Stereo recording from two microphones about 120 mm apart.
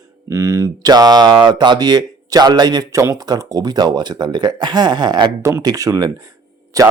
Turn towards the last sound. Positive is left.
turn(degrees=-30)  # may be behind; listen again after turning